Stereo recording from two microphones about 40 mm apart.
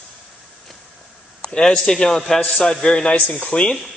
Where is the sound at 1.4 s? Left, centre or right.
Centre.